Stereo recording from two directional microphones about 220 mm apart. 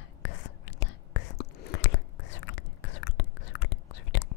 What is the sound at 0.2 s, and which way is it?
Whispering, 55° left (ahead or behind).